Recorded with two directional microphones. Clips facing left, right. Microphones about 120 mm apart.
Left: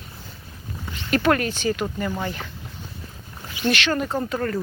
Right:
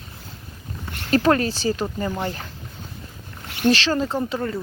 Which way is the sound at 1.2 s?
30° right (ahead or behind).